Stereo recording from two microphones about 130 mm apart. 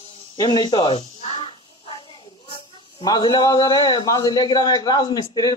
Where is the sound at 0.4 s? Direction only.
35° left (ahead or behind).